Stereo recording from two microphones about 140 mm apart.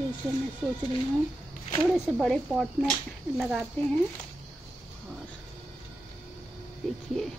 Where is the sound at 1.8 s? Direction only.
Centre (ahead or behind).